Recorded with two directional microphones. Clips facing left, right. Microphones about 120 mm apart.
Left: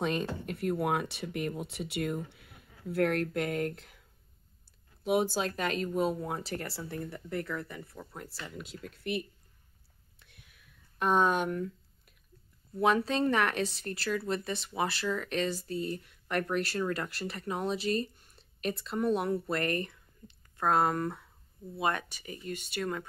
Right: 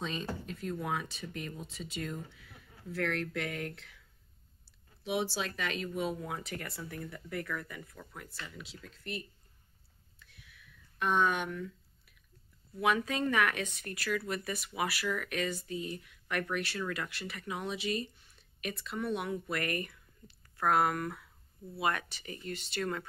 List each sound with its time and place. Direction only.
0.0 s speech: 60° left (ahead or behind); by 4.0 s 45° left (ahead or behind)
5.0 s speech: 50° left (ahead or behind); by 8.4 s 30° left (ahead or behind)
8.5 s speech: 55° left (ahead or behind)
10.1 s whispering: 60° left (ahead or behind)
11.0 s speech: 40° left (ahead or behind)
12.7 s speech: 35° left (ahead or behind)
18.0 s a sound: 45° left (ahead or behind)
18.9 s speech: 40° left (ahead or behind); by 23.0 s 15° left (ahead or behind)